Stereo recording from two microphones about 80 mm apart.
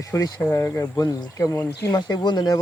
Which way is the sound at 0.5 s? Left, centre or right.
Left.